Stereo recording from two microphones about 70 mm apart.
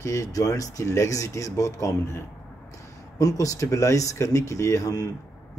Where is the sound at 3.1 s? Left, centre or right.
Left.